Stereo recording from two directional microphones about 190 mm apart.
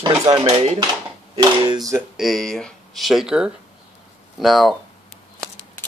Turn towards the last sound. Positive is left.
turn(degrees=0)  # may be behind; listen again after turning